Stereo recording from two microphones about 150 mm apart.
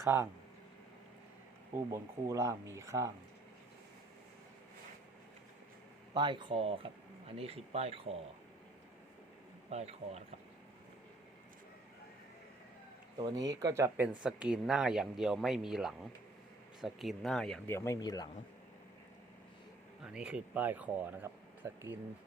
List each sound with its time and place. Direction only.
0.0 s speech: 15° right (ahead or behind)
1.9 s speech: 20° right (ahead or behind)
6.1 s speech: 30° right (ahead or behind)
9.6 s speech: 45° right (ahead or behind)
13.3 s speech: 25° right (ahead or behind); by 17.6 s 5° left (ahead or behind)
17.7 s speech: 20° left (ahead or behind)
20.1 s speech: 5° right (ahead or behind)